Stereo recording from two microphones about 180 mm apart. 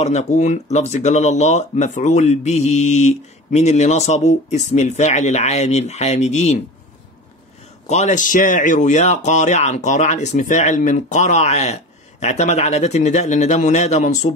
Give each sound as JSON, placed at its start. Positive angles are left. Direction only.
{"t": 0.0, "sound": "speech", "side_deg": 40}
{"t": 7.8, "sound": "speech", "side_deg": 40}